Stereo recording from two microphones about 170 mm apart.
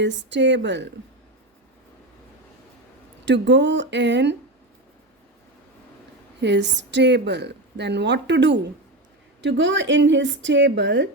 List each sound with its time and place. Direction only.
0.0 s a woman's voice: 90° right
3.2 s a woman's voice: 90° right
6.4 s a woman's voice: 90° right